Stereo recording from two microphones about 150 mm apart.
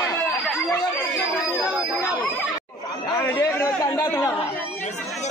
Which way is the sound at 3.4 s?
20° left (ahead or behind).